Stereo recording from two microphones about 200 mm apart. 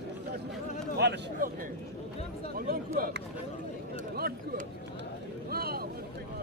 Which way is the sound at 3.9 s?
45° right (ahead or behind).